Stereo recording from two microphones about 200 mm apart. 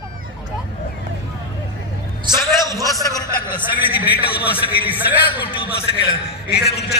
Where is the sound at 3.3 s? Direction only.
10° right (ahead or behind).